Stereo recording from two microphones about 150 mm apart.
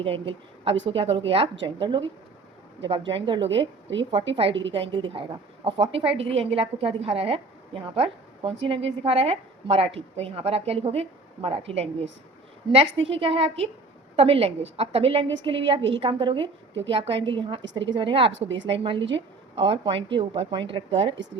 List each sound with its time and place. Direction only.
0.0 s a woman's voice: 35° right (ahead or behind)